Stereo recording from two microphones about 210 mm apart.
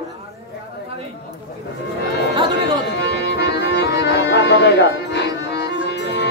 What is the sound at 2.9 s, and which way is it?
Music, 55° left (ahead or behind).